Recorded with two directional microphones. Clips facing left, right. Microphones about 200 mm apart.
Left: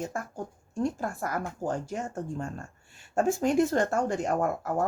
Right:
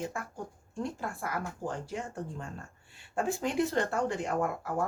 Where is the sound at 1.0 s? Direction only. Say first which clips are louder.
Left 4 dB; 45° left (ahead or behind).